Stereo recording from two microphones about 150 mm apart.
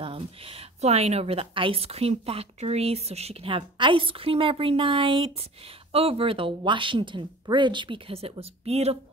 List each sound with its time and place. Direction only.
0.0 s a woman's voice: 40° right (ahead or behind)